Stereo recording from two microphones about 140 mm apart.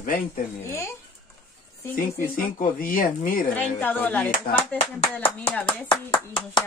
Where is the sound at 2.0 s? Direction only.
85° left.